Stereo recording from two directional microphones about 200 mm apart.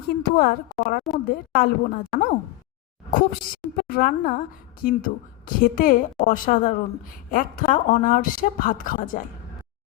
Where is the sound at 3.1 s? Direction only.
45° left (ahead or behind).